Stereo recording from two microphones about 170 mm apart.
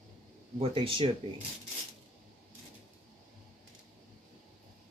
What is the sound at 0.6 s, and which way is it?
Speech, 30° right (ahead or behind).